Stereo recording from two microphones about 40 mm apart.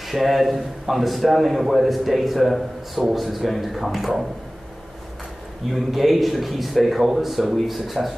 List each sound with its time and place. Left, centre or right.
0.0 s a man's voice: centre
5.7 s a man's voice: centre